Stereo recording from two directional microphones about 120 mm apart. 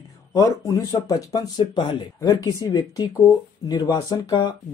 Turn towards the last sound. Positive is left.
turn(degrees=35)  # may be behind; listen again after turning